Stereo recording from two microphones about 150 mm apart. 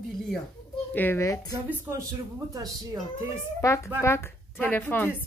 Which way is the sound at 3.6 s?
20° left (ahead or behind).